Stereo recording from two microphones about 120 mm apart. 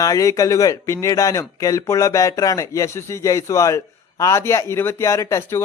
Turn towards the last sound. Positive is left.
turn(degrees=25)  # may be behind; listen again after turning